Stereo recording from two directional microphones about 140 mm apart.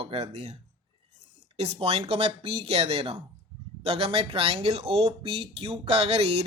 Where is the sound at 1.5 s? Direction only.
45° right (ahead or behind).